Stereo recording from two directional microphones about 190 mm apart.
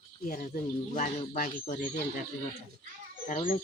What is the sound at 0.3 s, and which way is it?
Speech, 45° left (ahead or behind).